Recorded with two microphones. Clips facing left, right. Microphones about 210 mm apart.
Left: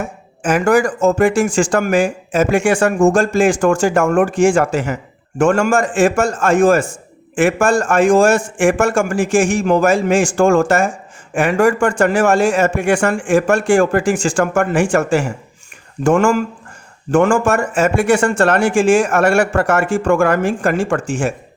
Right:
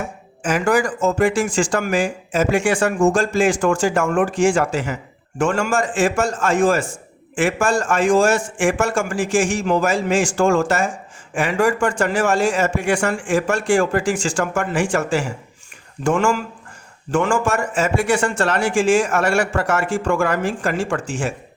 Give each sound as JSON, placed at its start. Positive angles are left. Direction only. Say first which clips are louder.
{"t": 0.4, "sound": "a man's voice", "louder": "left 4 dB", "side_deg": 50}